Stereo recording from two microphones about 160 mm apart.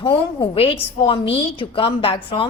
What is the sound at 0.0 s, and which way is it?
A woman's voice, 30° left (ahead or behind).